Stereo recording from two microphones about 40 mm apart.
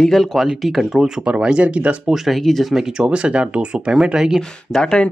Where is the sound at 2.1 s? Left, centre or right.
Centre.